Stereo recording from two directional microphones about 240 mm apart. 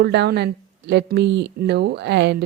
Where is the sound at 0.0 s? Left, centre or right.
Right.